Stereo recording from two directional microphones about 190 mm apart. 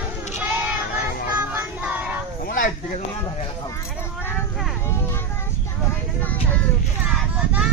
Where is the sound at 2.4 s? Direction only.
45° left (ahead or behind).